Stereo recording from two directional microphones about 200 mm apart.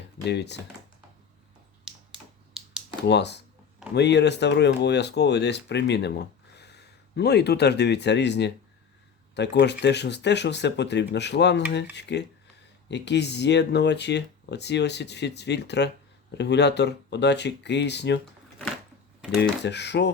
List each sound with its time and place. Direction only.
0.3 s speech: 60° left (ahead or behind)
1.8 s finger snapping: centre (ahead or behind)
3.1 s speech: 60° left (ahead or behind)
19.4 s speech: 60° left (ahead or behind)